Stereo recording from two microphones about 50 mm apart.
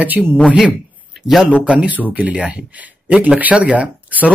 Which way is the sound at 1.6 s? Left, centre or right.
Right.